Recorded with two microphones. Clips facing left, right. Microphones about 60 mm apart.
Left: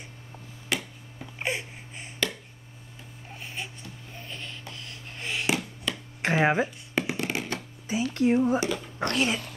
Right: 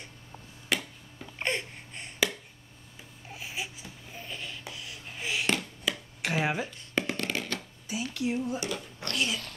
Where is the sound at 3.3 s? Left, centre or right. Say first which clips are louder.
Even; centre.